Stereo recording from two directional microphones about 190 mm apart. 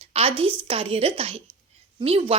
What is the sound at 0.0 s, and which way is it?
A woman's voice, 30° right (ahead or behind).